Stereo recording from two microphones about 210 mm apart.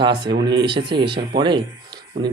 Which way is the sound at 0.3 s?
20° right (ahead or behind).